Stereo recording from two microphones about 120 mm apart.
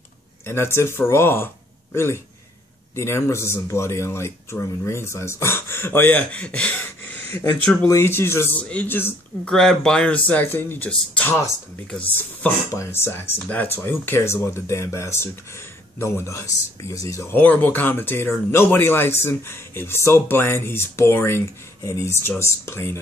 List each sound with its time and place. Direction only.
0.5 s speech: 20° left (ahead or behind)
3.0 s speech: 25° left (ahead or behind)
9.5 s speech: 5° left (ahead or behind); by 17.4 s 25° left (ahead or behind)
17.4 s speech: 15° left (ahead or behind)